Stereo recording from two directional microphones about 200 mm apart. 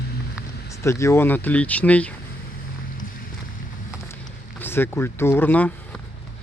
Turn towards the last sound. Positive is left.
turn(degrees=5)  # may be behind; listen again after turning